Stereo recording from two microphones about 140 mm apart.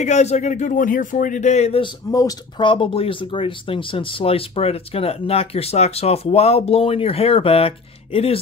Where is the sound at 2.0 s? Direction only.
25° left (ahead or behind).